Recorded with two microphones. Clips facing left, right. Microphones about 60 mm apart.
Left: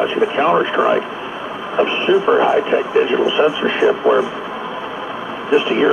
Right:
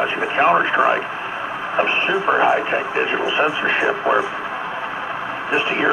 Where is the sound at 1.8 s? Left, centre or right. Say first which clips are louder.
Left 5 dB; right.